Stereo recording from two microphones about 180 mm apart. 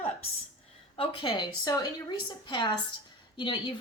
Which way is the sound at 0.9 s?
25° left (ahead or behind).